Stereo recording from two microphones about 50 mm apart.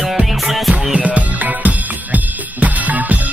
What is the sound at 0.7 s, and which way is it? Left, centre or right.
Music, right.